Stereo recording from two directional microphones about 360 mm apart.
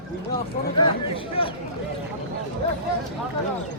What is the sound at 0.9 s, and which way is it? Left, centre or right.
Speech, centre.